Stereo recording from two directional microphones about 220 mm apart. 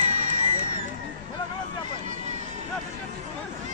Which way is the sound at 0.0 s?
35° right (ahead or behind).